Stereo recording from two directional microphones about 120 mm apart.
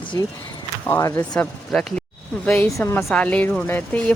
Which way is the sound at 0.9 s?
25° left (ahead or behind).